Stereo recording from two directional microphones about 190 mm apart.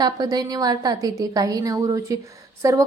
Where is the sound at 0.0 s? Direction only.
20° right (ahead or behind).